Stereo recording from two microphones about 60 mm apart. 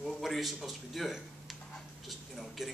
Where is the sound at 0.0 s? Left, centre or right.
Centre.